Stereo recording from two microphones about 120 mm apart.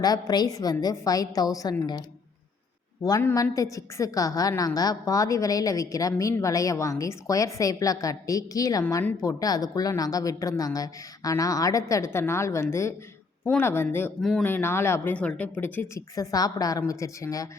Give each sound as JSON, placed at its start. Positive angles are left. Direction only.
{"t": 0.0, "sound": "a woman's voice", "side_deg": 35}
{"t": 3.2, "sound": "a woman's voice", "side_deg": 20}
{"t": 14.2, "sound": "speech", "side_deg": 5}
{"t": 14.4, "sound": "a woman's voice", "side_deg": 20}
{"t": 16.0, "sound": "a woman's voice", "side_deg": 30}